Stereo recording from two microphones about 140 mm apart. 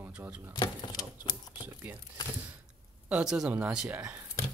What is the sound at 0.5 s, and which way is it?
Speech, 30° left (ahead or behind).